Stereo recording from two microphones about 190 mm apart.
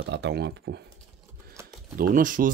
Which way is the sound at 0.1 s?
65° right (ahead or behind).